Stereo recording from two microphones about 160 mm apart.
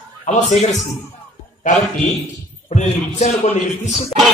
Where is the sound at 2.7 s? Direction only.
45° left (ahead or behind).